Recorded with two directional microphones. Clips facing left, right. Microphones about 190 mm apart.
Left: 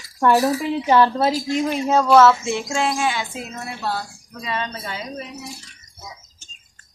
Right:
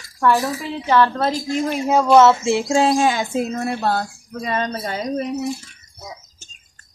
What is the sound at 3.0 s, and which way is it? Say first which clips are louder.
Speech: right 6 dB; 45° right (ahead or behind).